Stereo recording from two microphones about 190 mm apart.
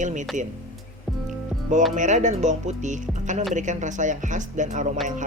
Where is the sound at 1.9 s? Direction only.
40° right (ahead or behind).